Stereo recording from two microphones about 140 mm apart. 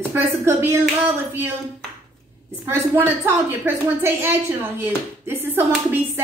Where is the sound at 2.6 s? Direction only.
15° right (ahead or behind).